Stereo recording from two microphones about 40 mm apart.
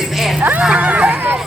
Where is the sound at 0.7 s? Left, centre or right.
Right.